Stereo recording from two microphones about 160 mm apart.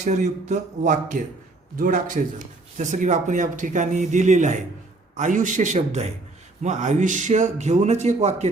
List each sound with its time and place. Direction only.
0.0 s speech: 45° right (ahead or behind)
1.7 s a man's voice: 60° right (ahead or behind); by 8.4 s 45° right (ahead or behind)